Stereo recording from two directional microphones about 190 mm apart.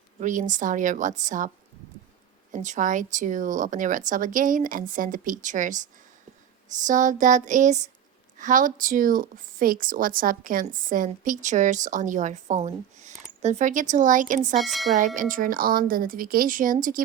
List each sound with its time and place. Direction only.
0.2 s a woman's voice: 40° right (ahead or behind)
2.5 s a woman's voice: 40° right (ahead or behind)
14.6 s speech: centre (ahead or behind)
14.9 s speech: 45° right (ahead or behind)